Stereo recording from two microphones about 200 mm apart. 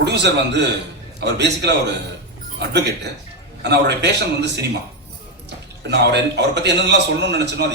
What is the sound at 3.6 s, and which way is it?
A man's voice, 55° right (ahead or behind).